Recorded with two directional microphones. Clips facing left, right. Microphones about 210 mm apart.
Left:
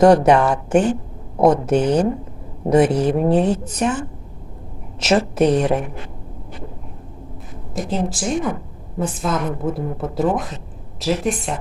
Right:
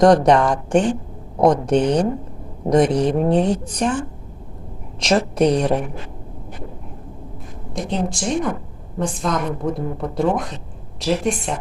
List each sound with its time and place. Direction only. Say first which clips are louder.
0.0 s speech: left 1 dB; 5° left (ahead or behind)
7.8 s speech: left 1 dB; 5° left (ahead or behind)